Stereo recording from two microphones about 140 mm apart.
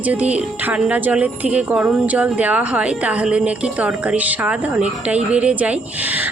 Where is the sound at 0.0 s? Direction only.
10° right (ahead or behind).